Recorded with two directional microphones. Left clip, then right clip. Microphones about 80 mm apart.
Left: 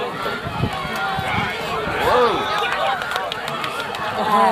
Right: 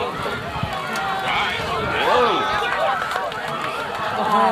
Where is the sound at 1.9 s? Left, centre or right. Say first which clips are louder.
Left 1 dB; left.